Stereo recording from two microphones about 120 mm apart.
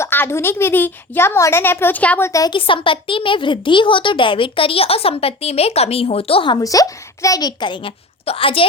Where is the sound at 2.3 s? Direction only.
30° left (ahead or behind).